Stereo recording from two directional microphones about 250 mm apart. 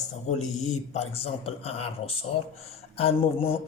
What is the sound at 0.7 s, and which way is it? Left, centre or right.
Speech, left.